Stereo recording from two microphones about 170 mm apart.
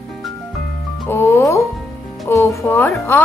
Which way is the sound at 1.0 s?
15° left (ahead or behind).